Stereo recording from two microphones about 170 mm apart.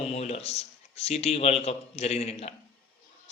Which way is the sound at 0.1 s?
40° left (ahead or behind).